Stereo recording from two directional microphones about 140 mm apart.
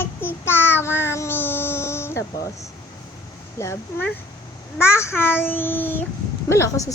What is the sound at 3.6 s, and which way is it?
A woman's voice, 20° left (ahead or behind).